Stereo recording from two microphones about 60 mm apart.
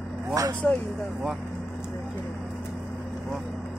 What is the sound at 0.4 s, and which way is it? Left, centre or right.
Speech, right.